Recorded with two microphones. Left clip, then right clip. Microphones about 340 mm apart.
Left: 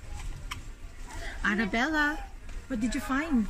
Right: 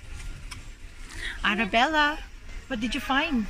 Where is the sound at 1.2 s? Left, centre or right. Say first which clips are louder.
Right 4 dB; centre.